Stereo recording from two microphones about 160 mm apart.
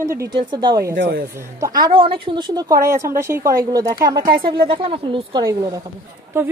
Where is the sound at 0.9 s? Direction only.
90° right.